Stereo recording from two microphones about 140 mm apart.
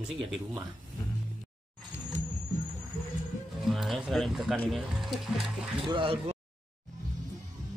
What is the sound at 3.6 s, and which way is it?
Speech, centre (ahead or behind).